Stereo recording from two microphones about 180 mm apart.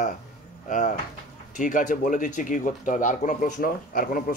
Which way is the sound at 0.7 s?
45° left (ahead or behind).